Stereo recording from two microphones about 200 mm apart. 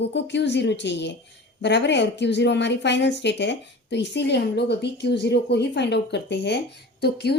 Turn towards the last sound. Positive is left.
turn(degrees=55)  # may be behind; listen again after turning